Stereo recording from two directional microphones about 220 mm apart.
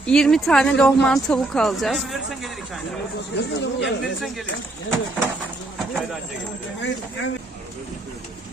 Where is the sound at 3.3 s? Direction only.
50° left (ahead or behind).